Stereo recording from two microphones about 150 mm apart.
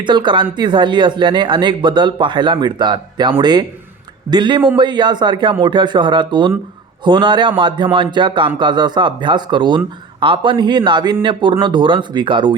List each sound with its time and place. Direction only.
0.0 s speech: 30° right (ahead or behind)